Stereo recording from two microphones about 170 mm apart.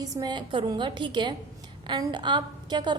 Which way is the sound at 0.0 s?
20° right (ahead or behind).